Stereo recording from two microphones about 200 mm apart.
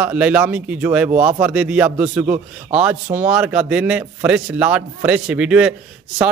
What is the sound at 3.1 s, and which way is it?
A man's voice, 5° right (ahead or behind).